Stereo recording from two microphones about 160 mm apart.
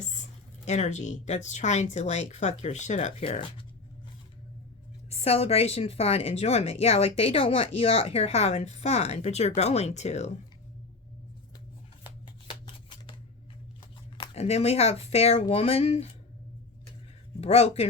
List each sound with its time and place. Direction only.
0.2 s speech: 45° left (ahead or behind)
5.0 s a woman's voice: 40° left (ahead or behind)
12.2 s scissors: 30° left (ahead or behind)
14.2 s a woman's voice: 40° left (ahead or behind)
17.4 s a woman's voice: 40° left (ahead or behind)